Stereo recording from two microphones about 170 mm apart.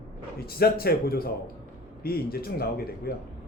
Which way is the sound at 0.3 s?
65° left (ahead or behind).